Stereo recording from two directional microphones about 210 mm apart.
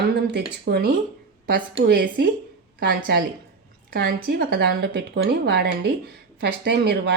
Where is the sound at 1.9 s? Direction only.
45° right (ahead or behind).